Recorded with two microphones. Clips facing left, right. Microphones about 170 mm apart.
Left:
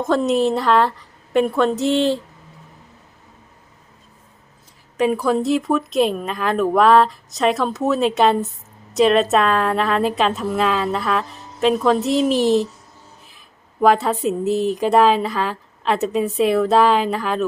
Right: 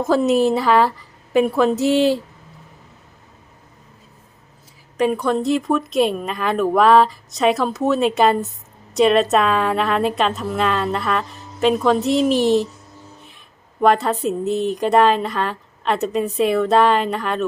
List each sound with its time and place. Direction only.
0.0 s speech: 5° right (ahead or behind)
4.9 s speech: centre (ahead or behind)
13.8 s speech: centre (ahead or behind)